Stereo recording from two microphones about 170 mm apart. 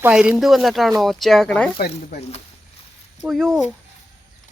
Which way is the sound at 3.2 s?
5° right (ahead or behind).